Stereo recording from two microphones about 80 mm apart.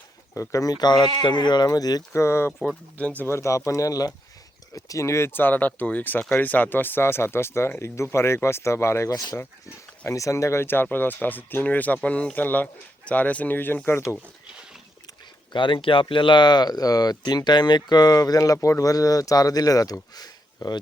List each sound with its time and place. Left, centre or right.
0.3 s speech: left
2.1 s speech: left
2.6 s speech: centre
3.2 s speech: left
15.5 s speech: left